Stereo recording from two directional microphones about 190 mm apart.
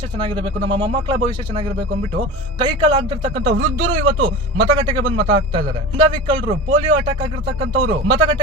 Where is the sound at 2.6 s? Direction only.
25° right (ahead or behind).